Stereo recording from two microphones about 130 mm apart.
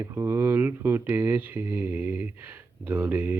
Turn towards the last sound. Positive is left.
turn(degrees=-15)  # may be behind; listen again after turning